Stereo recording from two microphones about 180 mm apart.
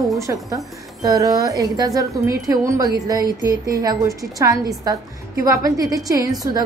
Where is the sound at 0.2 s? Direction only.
20° right (ahead or behind).